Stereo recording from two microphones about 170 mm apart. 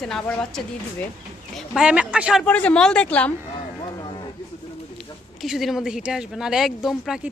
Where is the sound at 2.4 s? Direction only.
10° left (ahead or behind).